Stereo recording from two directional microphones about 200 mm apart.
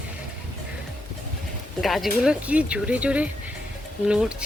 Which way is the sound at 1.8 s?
Centre (ahead or behind).